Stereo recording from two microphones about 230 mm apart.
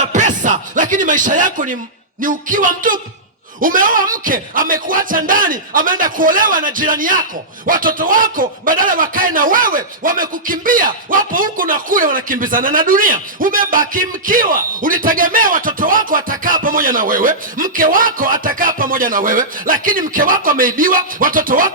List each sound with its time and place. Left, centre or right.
0.0 s music: right
2.2 s speech: right